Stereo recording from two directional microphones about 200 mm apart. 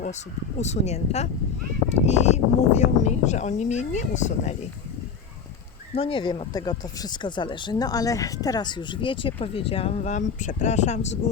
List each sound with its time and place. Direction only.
0.6 s speech: 35° left (ahead or behind)
5.9 s speech: 25° left (ahead or behind)